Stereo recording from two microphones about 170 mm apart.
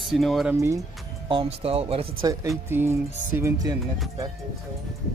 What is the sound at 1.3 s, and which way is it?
Speech, 35° right (ahead or behind).